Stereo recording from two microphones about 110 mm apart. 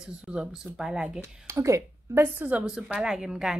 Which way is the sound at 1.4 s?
25° right (ahead or behind).